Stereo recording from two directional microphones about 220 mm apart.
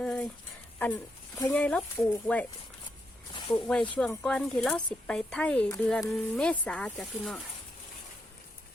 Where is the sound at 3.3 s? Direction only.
20° left (ahead or behind).